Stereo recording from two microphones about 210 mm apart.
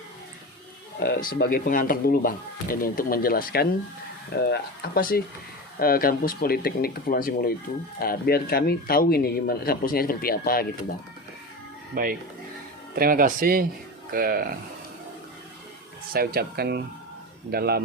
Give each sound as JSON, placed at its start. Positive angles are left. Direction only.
{"t": 0.9, "sound": "speech", "side_deg": 45}
{"t": 11.9, "sound": "speech", "side_deg": -40}
{"t": 16.1, "sound": "speech", "side_deg": -45}